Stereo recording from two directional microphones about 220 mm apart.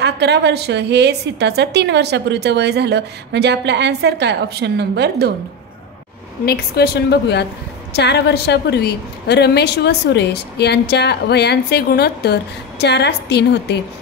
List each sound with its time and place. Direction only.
0.0 s a woman's voice: 50° right (ahead or behind)
6.4 s a woman's voice: 45° left (ahead or behind)